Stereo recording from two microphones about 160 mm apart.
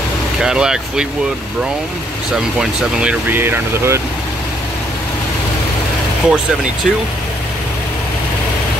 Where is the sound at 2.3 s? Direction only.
5° right (ahead or behind).